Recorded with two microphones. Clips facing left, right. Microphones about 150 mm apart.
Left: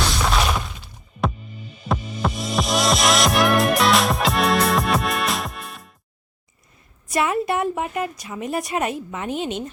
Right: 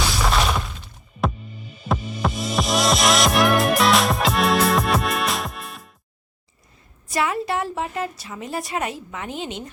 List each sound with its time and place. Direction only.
0.0 s music: centre (ahead or behind)
7.1 s a woman's voice: 20° left (ahead or behind)